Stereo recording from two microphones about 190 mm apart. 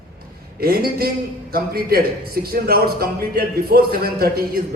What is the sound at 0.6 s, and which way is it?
A man's voice, 50° right (ahead or behind).